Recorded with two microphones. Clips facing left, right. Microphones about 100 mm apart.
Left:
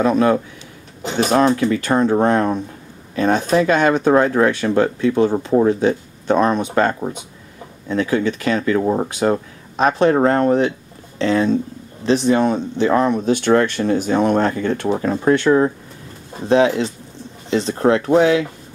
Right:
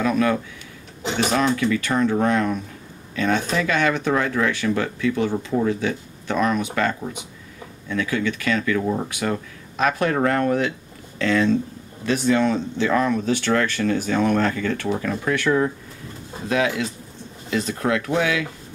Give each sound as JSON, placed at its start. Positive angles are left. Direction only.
{"t": 0.0, "sound": "speech", "side_deg": 35}
{"t": 1.5, "sound": "speech", "side_deg": 35}